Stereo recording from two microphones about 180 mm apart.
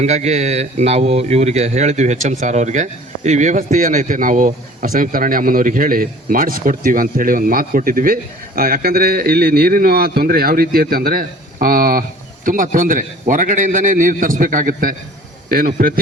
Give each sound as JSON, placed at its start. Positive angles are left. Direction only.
{"t": 0.0, "sound": "speech", "side_deg": -40}